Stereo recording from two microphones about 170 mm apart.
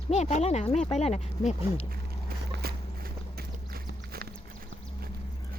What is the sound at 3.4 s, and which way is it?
Horse, 65° right (ahead or behind).